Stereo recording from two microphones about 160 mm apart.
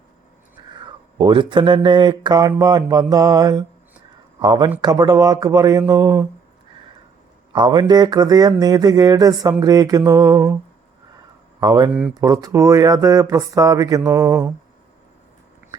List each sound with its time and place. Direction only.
0.7 s speech: 30° right (ahead or behind)
7.5 s speech: 25° right (ahead or behind)
11.6 s speech: 25° right (ahead or behind)